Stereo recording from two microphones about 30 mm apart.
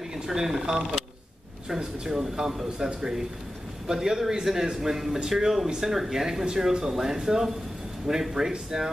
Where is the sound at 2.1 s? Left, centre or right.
Centre.